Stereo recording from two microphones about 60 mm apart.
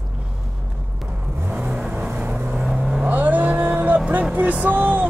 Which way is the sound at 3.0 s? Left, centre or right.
Right.